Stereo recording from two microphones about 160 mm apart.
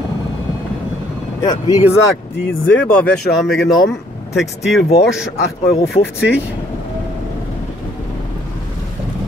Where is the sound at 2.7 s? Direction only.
10° left (ahead or behind).